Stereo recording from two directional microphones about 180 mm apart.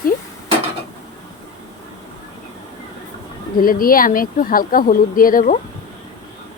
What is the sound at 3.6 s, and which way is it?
Speech, 50° left (ahead or behind).